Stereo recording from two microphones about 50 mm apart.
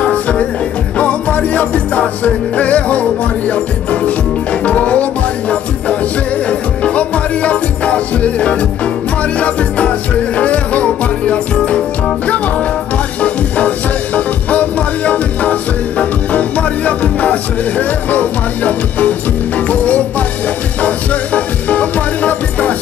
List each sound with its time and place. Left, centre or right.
0.0 s music: left
6.8 s music: left
13.2 s music: left